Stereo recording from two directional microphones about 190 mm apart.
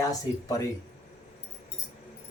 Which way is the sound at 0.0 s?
20° left (ahead or behind).